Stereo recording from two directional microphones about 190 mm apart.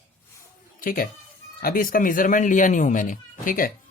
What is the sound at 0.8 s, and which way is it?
Speech, 45° left (ahead or behind).